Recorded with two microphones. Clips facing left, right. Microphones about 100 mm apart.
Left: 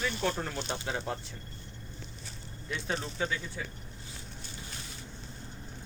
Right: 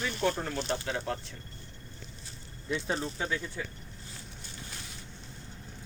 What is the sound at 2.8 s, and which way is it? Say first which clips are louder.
Speech: left 3 dB; 10° right (ahead or behind).